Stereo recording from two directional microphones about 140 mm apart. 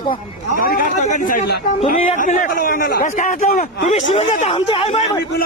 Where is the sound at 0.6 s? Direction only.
90° left; by 4.5 s 50° left (ahead or behind).